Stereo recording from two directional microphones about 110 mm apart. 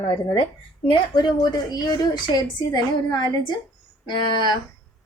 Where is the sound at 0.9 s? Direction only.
45° left (ahead or behind).